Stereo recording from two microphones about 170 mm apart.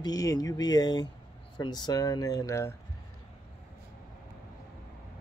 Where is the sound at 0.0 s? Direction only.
20° left (ahead or behind).